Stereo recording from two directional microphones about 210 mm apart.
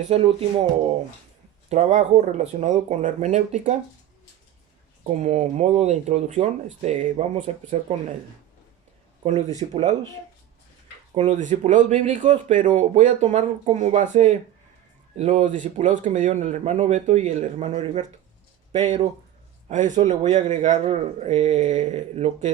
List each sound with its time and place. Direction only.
0.1 s speech: 25° right (ahead or behind)
1.7 s speech: 35° right (ahead or behind)
5.0 s speech: 35° right (ahead or behind)
9.2 s speech: 35° right (ahead or behind)
11.1 s speech: 35° right (ahead or behind)